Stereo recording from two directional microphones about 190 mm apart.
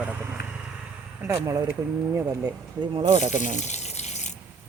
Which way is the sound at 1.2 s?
15° right (ahead or behind).